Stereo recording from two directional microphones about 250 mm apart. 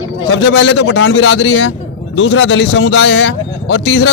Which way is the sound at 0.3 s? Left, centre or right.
Left.